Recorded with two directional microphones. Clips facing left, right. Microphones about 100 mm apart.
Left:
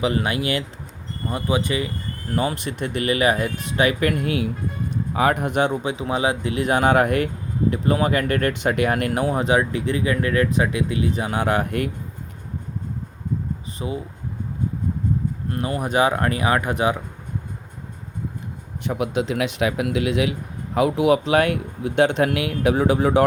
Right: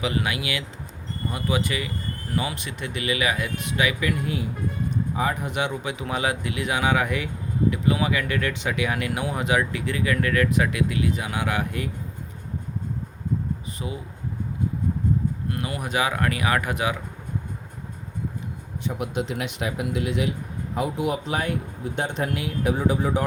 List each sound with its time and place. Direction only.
0.0 s speech: 35° left (ahead or behind)
1.3 s speech: 30° left (ahead or behind)
2.3 s speech: 45° left (ahead or behind)
4.0 s speech: 65° left (ahead or behind)
5.7 s speech: 30° left (ahead or behind)
13.7 s speech: 30° left (ahead or behind)
15.4 s speech: 35° left (ahead or behind)
18.9 s speech: 90° left; by 23.2 s 70° left (ahead or behind)